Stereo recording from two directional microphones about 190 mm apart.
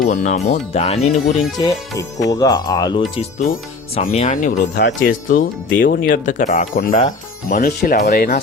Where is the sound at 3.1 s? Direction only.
30° left (ahead or behind).